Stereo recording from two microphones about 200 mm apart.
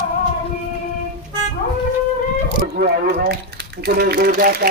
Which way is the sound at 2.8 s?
50° right (ahead or behind).